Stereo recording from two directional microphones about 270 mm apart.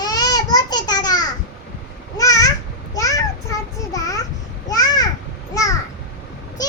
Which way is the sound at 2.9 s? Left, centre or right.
Centre.